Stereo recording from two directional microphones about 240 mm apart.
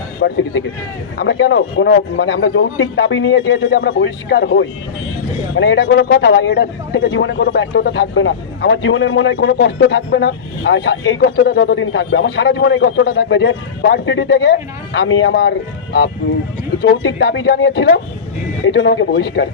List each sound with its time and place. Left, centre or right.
0.2 s a man's voice: left